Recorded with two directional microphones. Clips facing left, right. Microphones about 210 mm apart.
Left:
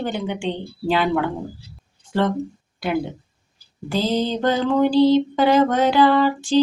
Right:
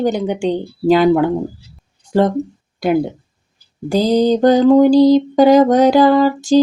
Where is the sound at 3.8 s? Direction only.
40° right (ahead or behind).